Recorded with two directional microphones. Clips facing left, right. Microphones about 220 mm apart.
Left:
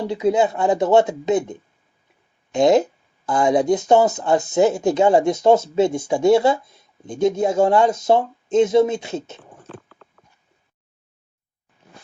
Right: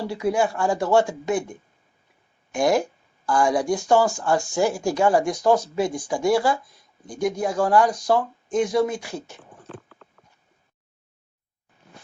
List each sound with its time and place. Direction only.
0.0 s speech: 20° left (ahead or behind)